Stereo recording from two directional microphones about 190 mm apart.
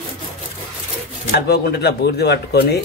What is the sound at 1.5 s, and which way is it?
Speech, 60° left (ahead or behind).